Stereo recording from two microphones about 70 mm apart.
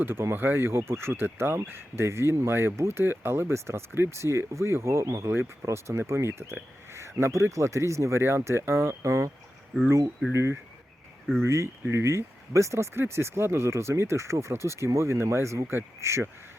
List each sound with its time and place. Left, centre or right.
0.0 s speech: right
10.3 s speech: right